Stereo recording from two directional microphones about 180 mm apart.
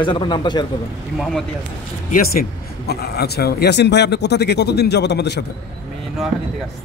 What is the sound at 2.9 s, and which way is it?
Speech, 60° left (ahead or behind).